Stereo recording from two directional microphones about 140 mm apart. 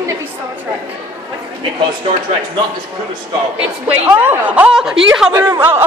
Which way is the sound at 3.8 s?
10° right (ahead or behind).